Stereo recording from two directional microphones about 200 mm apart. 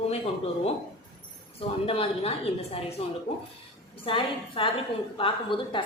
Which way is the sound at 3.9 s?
25° left (ahead or behind).